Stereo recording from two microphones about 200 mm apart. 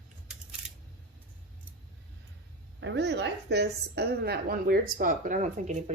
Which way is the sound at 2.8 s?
60° right (ahead or behind).